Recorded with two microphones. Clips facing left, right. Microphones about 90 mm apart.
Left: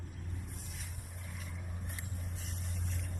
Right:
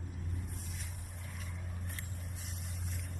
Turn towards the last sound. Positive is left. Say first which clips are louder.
# left 2 dB
turn(degrees=0)  # may be behind; listen again after turning